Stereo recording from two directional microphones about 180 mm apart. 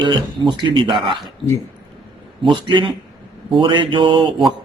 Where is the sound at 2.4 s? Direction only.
25° right (ahead or behind).